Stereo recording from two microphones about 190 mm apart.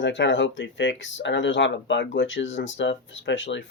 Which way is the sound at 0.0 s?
75° left (ahead or behind).